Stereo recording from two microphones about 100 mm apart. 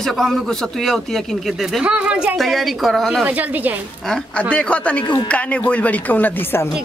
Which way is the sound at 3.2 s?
15° right (ahead or behind).